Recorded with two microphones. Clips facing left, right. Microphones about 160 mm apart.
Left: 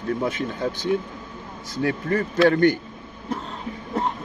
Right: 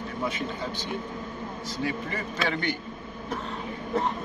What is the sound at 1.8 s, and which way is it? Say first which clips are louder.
Speech: left 9 dB; 55° left (ahead or behind).